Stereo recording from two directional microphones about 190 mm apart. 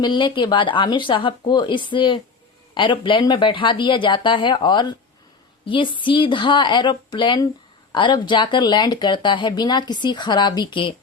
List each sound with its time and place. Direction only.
0.0 s speech: 25° left (ahead or behind)